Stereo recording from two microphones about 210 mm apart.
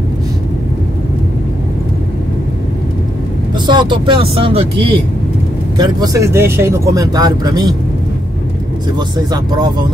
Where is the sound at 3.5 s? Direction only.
20° right (ahead or behind).